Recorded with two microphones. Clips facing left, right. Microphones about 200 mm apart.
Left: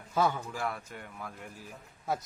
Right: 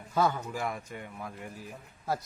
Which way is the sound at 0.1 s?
Centre (ahead or behind).